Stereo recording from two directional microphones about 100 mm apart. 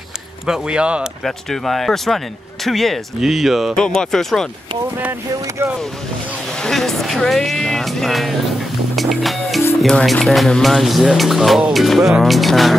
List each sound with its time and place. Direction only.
0.5 s speech: 10° right (ahead or behind)
1.2 s speech: centre (ahead or behind)
5.6 s speech: 25° right (ahead or behind)
6.5 s speech: 5° left (ahead or behind)
8.9 s music: centre (ahead or behind)
9.8 s speech: 5° left (ahead or behind)